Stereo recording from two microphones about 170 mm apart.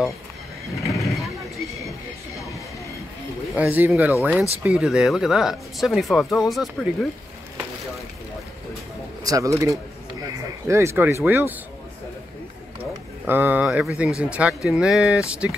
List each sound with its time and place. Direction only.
1.0 s vehicle: centre (ahead or behind)
3.5 s speech: 10° right (ahead or behind)
9.2 s speech: 20° right (ahead or behind)
13.3 s speech: 10° right (ahead or behind)